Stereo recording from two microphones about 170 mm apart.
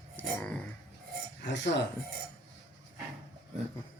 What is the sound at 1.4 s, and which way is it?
Speech, 90° left.